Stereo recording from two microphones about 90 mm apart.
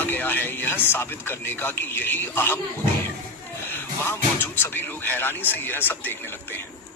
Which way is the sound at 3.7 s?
25° left (ahead or behind).